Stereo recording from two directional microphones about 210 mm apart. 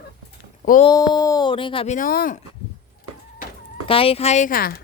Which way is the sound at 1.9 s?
40° left (ahead or behind).